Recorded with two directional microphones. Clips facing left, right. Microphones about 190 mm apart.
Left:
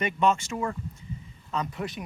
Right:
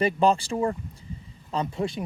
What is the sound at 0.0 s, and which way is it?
Speech, 35° right (ahead or behind).